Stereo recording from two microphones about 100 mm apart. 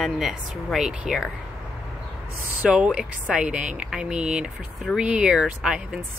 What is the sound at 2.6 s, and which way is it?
Speech, 10° right (ahead or behind).